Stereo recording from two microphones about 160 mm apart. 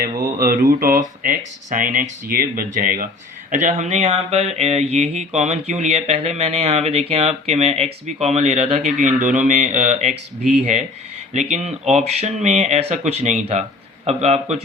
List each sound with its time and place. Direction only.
0.3 s speech: 65° right (ahead or behind); by 14.6 s 45° right (ahead or behind)